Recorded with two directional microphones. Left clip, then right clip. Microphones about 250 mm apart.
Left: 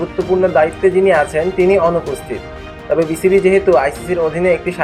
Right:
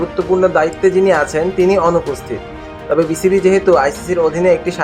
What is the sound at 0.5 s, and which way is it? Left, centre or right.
Speech, centre.